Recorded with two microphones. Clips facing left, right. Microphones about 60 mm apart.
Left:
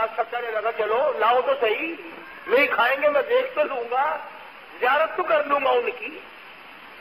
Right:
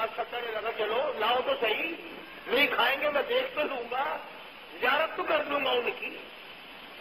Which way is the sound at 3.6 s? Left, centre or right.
Left.